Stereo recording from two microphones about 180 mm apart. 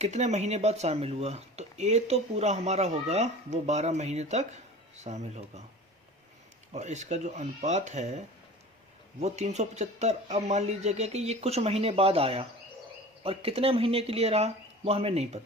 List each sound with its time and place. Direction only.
0.0 s speech: 40° right (ahead or behind)
6.7 s speech: 40° right (ahead or behind)
9.2 s speech: 40° right (ahead or behind)